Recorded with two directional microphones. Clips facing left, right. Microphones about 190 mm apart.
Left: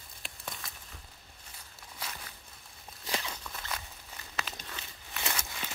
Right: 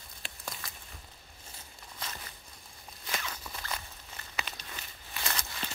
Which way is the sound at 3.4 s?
Centre (ahead or behind).